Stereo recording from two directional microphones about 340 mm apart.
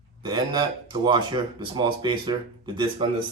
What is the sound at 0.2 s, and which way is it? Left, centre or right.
Speech, centre.